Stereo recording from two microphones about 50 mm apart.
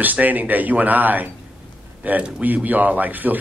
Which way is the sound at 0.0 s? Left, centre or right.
Right.